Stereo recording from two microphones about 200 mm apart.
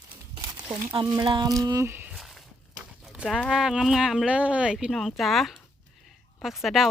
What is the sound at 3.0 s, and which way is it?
Speech, 5° right (ahead or behind).